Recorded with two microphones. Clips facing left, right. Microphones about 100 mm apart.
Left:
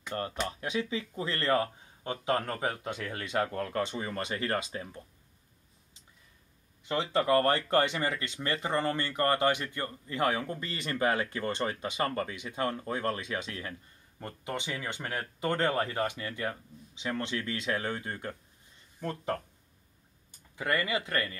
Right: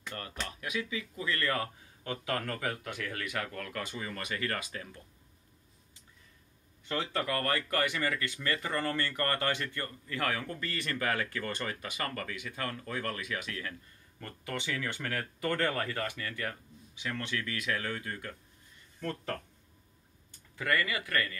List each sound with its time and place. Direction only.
0.1 s speech: 30° left (ahead or behind)
6.9 s speech: 20° left (ahead or behind)
20.5 s speech: 20° left (ahead or behind)